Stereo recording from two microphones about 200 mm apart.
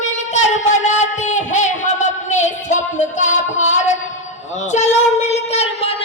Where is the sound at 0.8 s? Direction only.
35° left (ahead or behind).